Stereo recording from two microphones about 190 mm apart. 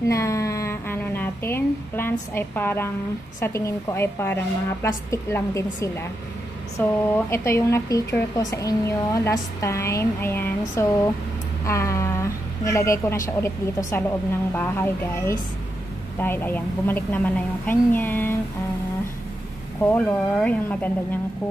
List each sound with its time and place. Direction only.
0.1 s a sound: 15° left (ahead or behind)
3.3 s speech: 15° left (ahead or behind)
19.8 s speech: 10° left (ahead or behind)